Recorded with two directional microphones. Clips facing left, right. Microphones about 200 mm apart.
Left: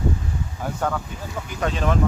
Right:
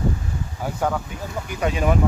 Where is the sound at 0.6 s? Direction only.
10° right (ahead or behind).